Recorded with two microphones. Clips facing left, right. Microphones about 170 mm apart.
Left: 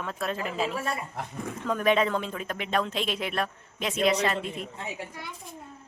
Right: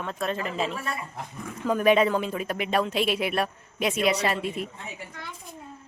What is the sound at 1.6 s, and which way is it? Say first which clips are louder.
Speech: right 4 dB; 10° right (ahead or behind).